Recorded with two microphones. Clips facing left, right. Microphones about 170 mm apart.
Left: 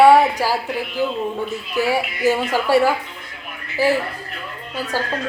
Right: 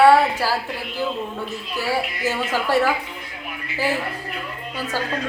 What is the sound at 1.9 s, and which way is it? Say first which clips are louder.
A woman's voice: left 4 dB; 15° left (ahead or behind).